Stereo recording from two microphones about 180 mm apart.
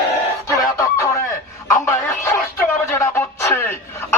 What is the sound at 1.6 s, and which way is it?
Telephone, 15° left (ahead or behind).